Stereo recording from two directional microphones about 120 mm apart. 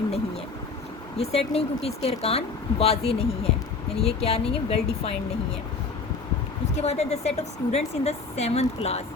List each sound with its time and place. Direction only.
1.2 s a woman's voice: 60° left (ahead or behind)
6.7 s a woman's voice: 65° left (ahead or behind)